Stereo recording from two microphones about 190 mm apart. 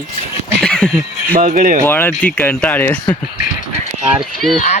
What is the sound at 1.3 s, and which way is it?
Speech, 45° right (ahead or behind).